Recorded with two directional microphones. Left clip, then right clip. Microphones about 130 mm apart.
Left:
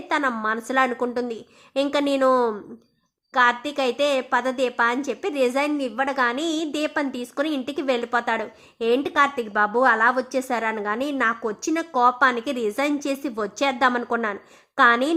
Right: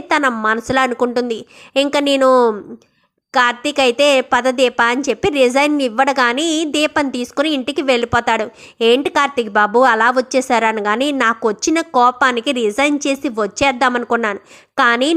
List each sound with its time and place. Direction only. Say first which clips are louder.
0.1 s a woman's voice: right 8 dB; 35° right (ahead or behind)